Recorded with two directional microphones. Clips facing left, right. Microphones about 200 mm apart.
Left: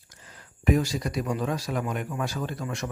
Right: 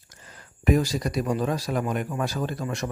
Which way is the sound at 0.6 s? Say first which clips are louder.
Right 2 dB; 40° right (ahead or behind).